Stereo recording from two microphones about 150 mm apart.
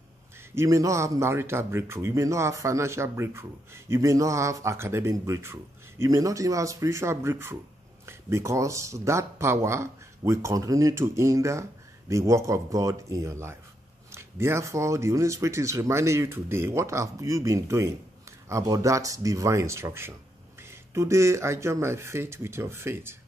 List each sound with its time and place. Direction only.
0.6 s speech: 20° right (ahead or behind)